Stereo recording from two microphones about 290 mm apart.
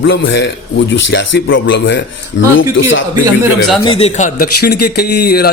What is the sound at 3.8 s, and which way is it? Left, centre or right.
A man's voice, centre.